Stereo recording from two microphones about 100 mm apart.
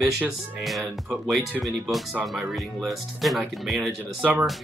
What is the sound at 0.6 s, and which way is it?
Speech, centre (ahead or behind).